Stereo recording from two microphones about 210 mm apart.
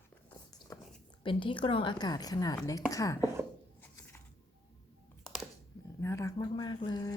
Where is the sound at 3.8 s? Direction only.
10° left (ahead or behind).